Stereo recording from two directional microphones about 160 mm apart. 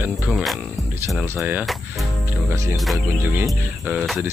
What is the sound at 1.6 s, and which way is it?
Speech, centre (ahead or behind).